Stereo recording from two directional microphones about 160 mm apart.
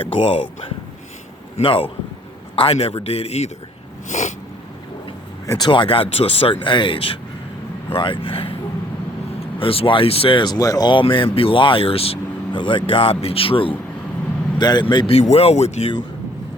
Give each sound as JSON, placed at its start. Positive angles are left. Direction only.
{"t": 0.0, "sound": "speech", "side_deg": 35}
{"t": 1.5, "sound": "speech", "side_deg": 35}
{"t": 4.1, "sound": "snort", "side_deg": 50}
{"t": 5.5, "sound": "speech", "side_deg": 30}
{"t": 9.6, "sound": "speech", "side_deg": 35}